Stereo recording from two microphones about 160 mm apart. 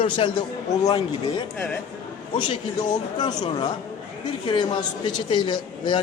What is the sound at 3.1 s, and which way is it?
A woman's voice, 25° left (ahead or behind).